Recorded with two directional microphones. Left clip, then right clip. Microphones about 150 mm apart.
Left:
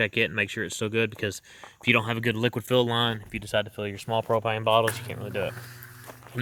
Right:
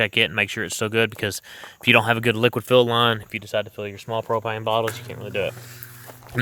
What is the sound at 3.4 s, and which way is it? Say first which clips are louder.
Speech: left 1 dB; 10° left (ahead or behind).